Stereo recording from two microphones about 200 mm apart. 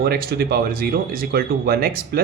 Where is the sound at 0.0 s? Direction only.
50° right (ahead or behind).